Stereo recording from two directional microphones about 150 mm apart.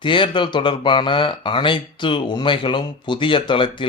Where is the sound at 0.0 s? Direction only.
35° left (ahead or behind).